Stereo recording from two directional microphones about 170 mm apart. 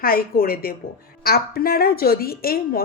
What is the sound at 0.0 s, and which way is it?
Speech, 60° left (ahead or behind).